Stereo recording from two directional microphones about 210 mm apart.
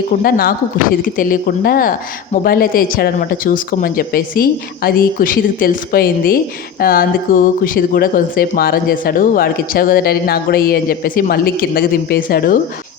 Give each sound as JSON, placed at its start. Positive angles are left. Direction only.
{"t": 0.2, "sound": "speech", "side_deg": 45}